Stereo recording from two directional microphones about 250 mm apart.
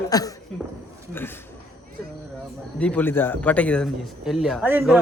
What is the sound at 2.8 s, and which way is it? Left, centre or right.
A man's voice, centre.